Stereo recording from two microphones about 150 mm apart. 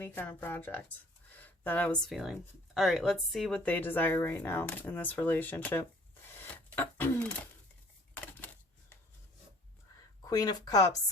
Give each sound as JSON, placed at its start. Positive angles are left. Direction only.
{"t": 0.0, "sound": "a woman's voice", "side_deg": 15}
{"t": 1.3, "sound": "a sound", "side_deg": 10}
{"t": 2.0, "sound": "a woman's voice", "side_deg": 0}
{"t": 6.4, "sound": "cash register", "side_deg": 15}
{"t": 8.1, "sound": "a sound", "side_deg": 10}
{"t": 10.2, "sound": "speech", "side_deg": 25}